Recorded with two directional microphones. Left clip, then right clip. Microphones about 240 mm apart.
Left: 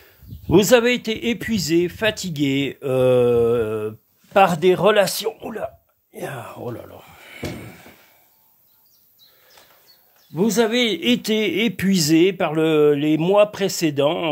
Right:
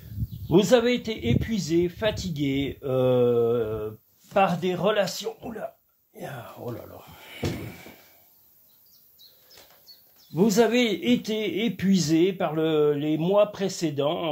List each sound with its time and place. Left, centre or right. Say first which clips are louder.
0.5 s speech: left 5 dB; left
7.2 s slam: left 1 dB; centre
10.3 s speech: left 2 dB; left